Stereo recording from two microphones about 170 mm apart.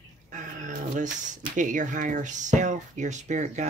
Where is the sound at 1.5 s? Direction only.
50° right (ahead or behind).